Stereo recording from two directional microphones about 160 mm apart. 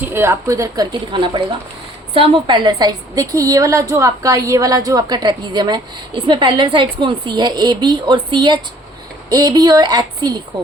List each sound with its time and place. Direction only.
0.0 s a woman's voice: 15° right (ahead or behind)